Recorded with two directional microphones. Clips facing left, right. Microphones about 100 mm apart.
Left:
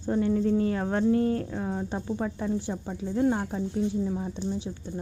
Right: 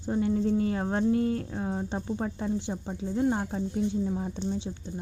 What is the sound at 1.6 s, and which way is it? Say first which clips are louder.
Speech: even; 25° right (ahead or behind).